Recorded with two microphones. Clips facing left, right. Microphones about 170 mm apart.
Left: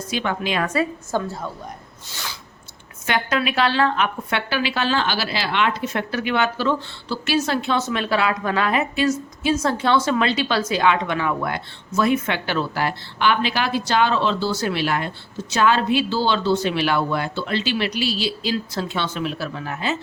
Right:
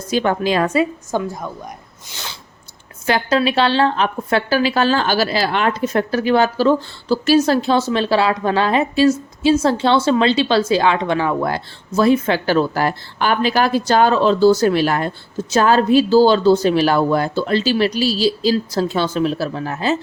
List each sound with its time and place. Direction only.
0.1 s a woman's voice: 40° right (ahead or behind)
0.7 s a woman's voice: 20° right (ahead or behind)
2.0 s a sound: 20° right (ahead or behind)
3.1 s a woman's voice: 30° right (ahead or behind)